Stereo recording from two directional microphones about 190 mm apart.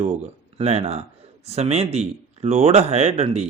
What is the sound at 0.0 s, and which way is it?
A man's voice, 35° right (ahead or behind).